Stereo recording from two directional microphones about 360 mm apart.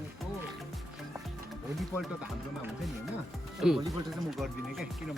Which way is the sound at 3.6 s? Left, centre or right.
Centre.